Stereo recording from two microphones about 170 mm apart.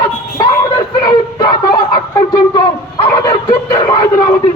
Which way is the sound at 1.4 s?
25° left (ahead or behind).